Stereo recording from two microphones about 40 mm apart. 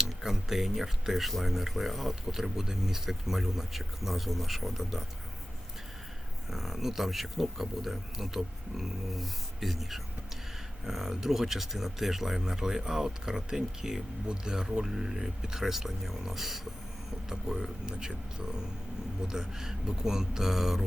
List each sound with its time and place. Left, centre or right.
0.0 s speech: centre
6.5 s speech: centre